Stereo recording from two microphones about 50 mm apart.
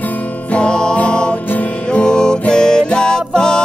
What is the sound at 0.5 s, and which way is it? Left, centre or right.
Music, centre.